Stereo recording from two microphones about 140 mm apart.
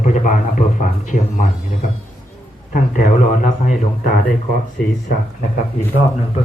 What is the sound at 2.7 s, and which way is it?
A man's voice, 65° left (ahead or behind).